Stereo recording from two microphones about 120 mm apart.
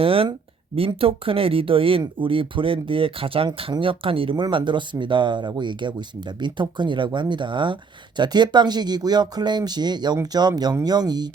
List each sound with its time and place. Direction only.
0.0 s speech: 50° right (ahead or behind); by 11.3 s 35° right (ahead or behind)